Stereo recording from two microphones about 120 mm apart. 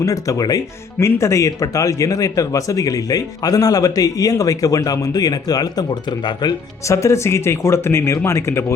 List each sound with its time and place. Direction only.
0.0 s speech: 30° left (ahead or behind)
6.8 s speech: 25° left (ahead or behind)